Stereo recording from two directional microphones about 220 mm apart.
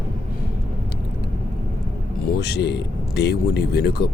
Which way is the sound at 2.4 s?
50° left (ahead or behind).